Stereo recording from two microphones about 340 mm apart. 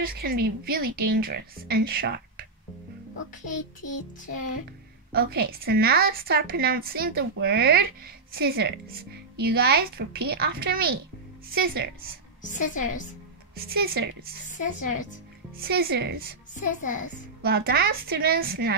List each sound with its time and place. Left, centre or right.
0.0 s a woman's voice: right
5.1 s a woman's voice: right
12.4 s a woman's voice: left
13.6 s a woman's voice: right
14.5 s speech: left
15.6 s a woman's voice: right
16.6 s speech: left
17.4 s a woman's voice: right